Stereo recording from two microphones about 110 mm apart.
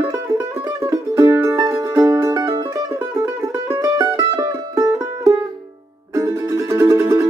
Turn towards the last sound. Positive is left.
turn(degrees=-30)  # may be behind; listen again after turning